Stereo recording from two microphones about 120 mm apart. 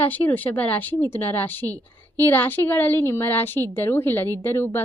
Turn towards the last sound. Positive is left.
turn(degrees=20)  # may be behind; listen again after turning